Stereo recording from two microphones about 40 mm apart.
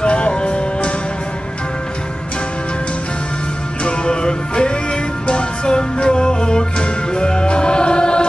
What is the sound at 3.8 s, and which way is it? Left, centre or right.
Music, left.